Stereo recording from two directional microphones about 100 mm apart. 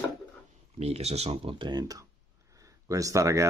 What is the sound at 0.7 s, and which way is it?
Speech, 90° right.